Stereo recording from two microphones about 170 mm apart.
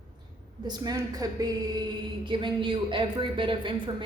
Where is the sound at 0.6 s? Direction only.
25° right (ahead or behind).